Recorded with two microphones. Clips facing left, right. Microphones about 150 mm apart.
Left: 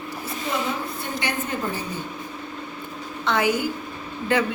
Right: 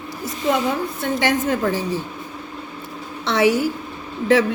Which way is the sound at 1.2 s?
90° right.